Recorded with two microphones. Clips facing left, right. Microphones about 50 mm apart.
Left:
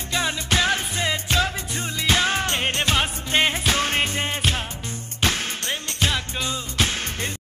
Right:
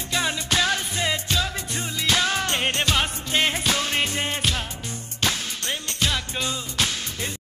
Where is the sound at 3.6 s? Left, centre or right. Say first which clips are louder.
Left 2 dB; left.